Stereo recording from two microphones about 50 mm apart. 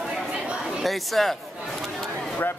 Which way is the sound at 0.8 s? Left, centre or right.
Centre.